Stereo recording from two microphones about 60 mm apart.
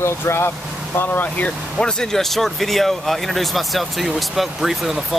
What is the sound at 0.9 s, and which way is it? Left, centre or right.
Speech, left.